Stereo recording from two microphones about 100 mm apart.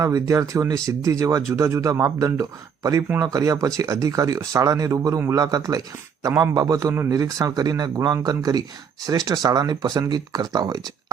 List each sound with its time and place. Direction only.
0.0 s a man's voice: 35° right (ahead or behind)